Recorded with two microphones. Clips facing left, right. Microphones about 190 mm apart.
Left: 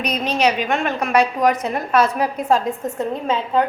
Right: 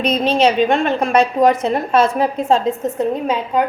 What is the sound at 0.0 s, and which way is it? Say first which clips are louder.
A woman's voice: right 5 dB; 25° right (ahead or behind).